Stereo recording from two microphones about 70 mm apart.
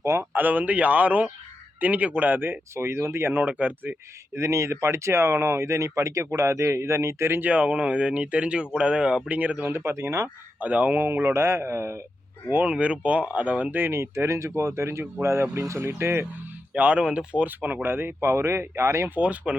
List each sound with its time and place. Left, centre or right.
0.0 s speech: right
0.3 s speech: right
4.4 s speech: right
7.5 s speech: centre
9.7 s speech: right
10.6 s speech: right
12.6 s speech: centre; by 16.2 s right
16.7 s speech: right
19.1 s speech: right